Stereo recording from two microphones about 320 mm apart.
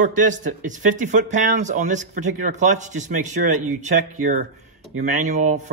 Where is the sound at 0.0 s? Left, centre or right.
Right.